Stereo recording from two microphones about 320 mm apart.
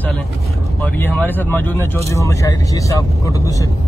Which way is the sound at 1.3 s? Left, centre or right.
Centre.